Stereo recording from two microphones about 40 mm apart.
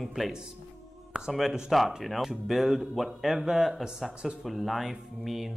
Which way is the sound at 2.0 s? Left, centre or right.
Centre.